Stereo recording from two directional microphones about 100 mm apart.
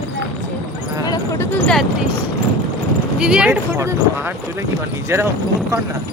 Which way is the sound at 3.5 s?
25° right (ahead or behind).